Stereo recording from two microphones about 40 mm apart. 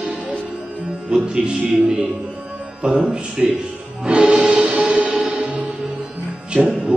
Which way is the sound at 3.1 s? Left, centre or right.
Right.